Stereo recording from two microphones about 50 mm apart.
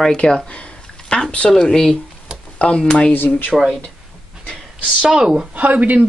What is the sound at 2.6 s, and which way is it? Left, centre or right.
Speech, centre.